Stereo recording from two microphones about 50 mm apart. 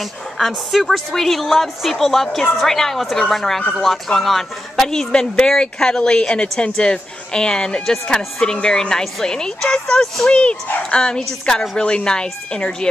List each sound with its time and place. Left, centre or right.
0.0 s a woman's voice: centre